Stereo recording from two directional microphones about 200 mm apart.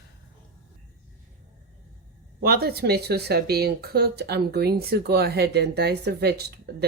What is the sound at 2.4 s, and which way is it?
Speech, 50° right (ahead or behind).